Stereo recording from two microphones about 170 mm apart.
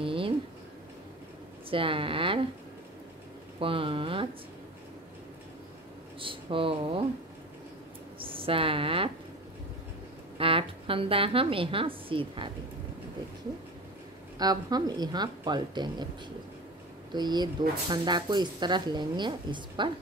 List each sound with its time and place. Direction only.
0.0 s a sound: 30° right (ahead or behind)
1.7 s speech: 30° right (ahead or behind)
3.5 s speech: 30° right (ahead or behind)
6.1 s speech: 30° right (ahead or behind)
8.2 s a woman's voice: 30° right (ahead or behind)
10.3 s a woman's voice: 30° right (ahead or behind)
14.4 s speech: 25° right (ahead or behind)
17.1 s speech: 25° right (ahead or behind)